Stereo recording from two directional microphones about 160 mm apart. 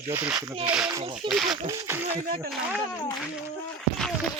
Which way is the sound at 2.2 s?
60° right (ahead or behind).